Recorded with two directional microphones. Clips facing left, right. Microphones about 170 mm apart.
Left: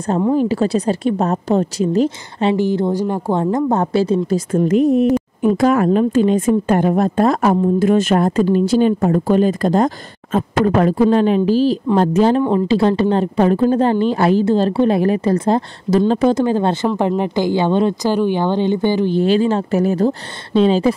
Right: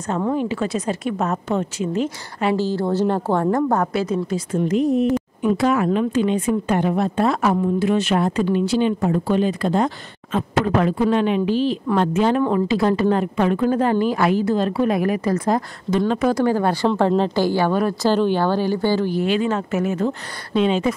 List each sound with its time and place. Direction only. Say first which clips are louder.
0.3 s a woman's voice: left 7 dB; 35° left (ahead or behind)
2.0 s a woman's voice: left 4 dB; 20° left (ahead or behind)
4.5 s a woman's voice: left 5 dB; 55° left (ahead or behind); by 20.9 s 35° left (ahead or behind)